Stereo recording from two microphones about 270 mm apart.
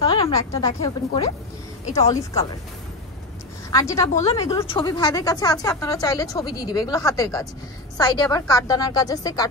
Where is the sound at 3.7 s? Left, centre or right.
Centre.